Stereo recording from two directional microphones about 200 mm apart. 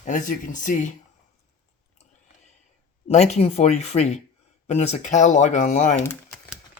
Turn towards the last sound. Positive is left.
turn(degrees=35)  # may be behind; listen again after turning